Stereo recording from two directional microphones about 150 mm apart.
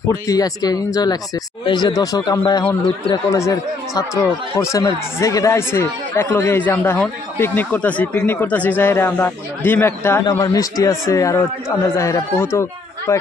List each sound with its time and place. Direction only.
0.1 s speech: 25° left (ahead or behind)